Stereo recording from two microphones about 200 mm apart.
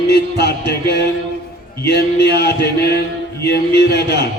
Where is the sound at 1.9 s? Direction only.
55° left (ahead or behind).